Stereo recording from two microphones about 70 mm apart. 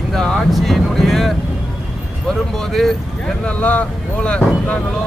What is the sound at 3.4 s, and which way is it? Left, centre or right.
Speech, left.